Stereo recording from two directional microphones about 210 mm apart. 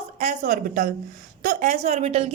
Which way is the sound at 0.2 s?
35° right (ahead or behind).